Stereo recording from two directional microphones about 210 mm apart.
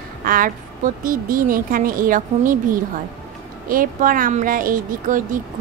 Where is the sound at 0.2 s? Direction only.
40° right (ahead or behind).